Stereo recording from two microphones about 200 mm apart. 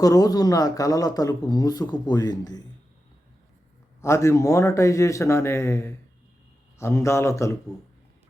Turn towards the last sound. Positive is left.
turn(degrees=15)  # may be behind; listen again after turning